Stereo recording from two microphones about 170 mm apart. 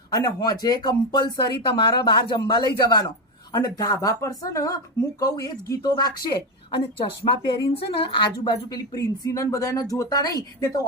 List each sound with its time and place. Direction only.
0.1 s speech: 20° left (ahead or behind)
7.3 s speech: 25° left (ahead or behind)